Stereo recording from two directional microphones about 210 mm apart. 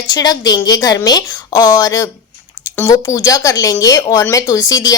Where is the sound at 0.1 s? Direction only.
20° left (ahead or behind).